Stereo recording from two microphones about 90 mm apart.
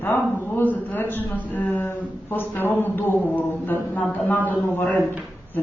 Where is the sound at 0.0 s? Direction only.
20° left (ahead or behind).